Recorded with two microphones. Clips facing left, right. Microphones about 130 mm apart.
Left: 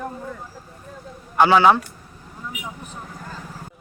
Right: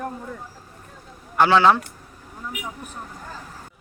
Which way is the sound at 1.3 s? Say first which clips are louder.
Left 1 dB; 10° left (ahead or behind).